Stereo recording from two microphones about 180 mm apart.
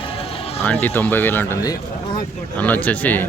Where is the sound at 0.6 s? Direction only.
10° left (ahead or behind).